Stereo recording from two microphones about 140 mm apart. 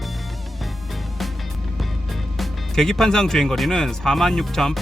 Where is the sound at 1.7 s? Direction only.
Centre (ahead or behind).